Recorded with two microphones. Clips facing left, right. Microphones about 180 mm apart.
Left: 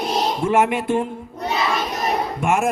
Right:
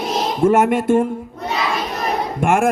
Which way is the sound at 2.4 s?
50° right (ahead or behind).